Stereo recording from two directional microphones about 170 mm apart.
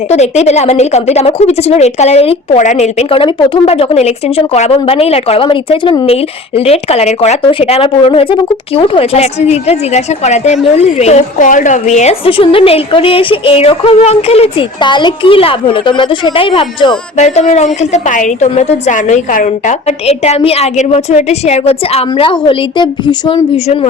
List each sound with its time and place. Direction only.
0.1 s speech: 40° left (ahead or behind)
6.6 s speech: 35° left (ahead or behind)
17.2 s speech: 45° left (ahead or behind); by 23.4 s 25° left (ahead or behind)